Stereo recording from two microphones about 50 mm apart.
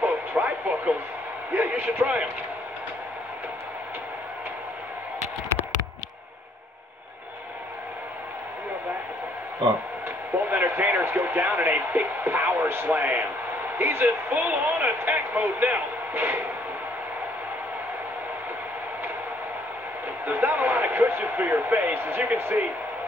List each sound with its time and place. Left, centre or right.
0.0 s radio: right
1.5 s a man's voice: right
10.4 s a sound: right
11.1 s speech: right
12.6 s a man's voice: right
12.9 s speech: right
13.7 s speech: right
14.0 s speech: right
20.2 s speech: right